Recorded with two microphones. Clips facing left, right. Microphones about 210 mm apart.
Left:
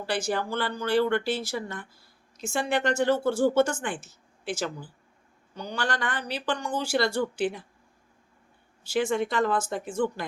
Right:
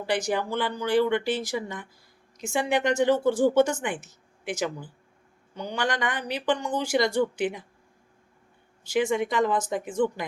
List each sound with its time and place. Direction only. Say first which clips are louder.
0.0 s speech: right 2 dB; 20° right (ahead or behind)
8.9 s speech: right 1 dB; 15° right (ahead or behind)